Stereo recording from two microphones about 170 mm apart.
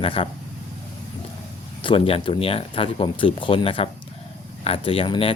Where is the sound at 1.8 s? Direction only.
35° left (ahead or behind).